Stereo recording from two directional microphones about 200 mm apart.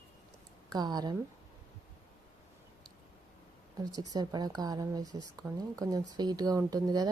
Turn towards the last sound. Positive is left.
turn(degrees=-20)  # may be behind; listen again after turning